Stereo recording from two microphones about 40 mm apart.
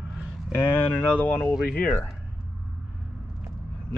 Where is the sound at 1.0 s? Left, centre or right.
Left.